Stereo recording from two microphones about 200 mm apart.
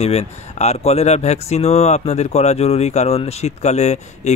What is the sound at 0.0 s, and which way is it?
Speech, 30° left (ahead or behind).